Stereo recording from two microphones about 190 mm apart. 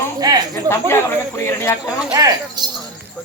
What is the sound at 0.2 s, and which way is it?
Snake, 20° right (ahead or behind).